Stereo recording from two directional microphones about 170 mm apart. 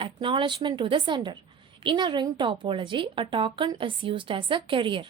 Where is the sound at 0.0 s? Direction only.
30° right (ahead or behind).